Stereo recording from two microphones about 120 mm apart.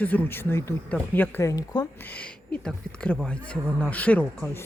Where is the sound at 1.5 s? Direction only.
30° left (ahead or behind).